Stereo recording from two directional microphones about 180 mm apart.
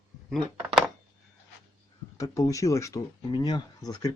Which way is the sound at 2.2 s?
15° left (ahead or behind).